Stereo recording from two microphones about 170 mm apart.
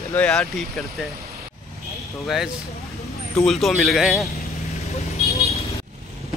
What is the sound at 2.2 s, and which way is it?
Speech, centre (ahead or behind).